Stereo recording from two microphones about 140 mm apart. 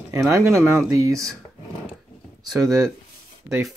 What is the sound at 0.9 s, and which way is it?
Speech, 20° right (ahead or behind).